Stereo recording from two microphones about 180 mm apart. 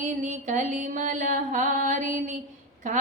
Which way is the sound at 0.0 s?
45° right (ahead or behind).